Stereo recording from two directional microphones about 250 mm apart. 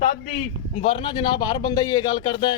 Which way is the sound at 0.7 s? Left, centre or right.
Left.